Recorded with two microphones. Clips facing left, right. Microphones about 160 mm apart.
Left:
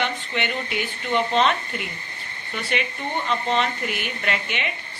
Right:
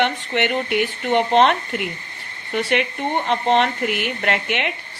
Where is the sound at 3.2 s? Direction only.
65° right (ahead or behind).